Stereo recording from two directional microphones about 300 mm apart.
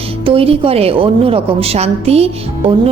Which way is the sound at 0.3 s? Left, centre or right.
Centre.